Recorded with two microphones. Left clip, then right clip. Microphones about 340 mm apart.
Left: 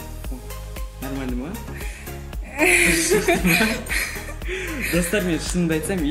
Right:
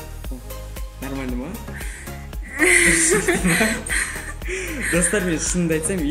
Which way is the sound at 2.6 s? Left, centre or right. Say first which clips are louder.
Right 1 dB; centre.